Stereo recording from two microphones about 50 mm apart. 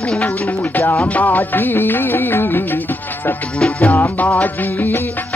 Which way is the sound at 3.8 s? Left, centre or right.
Left.